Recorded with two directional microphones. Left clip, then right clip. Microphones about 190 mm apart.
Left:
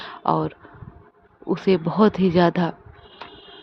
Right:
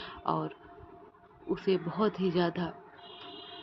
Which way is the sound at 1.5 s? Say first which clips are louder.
Left 10 dB; 45° left (ahead or behind).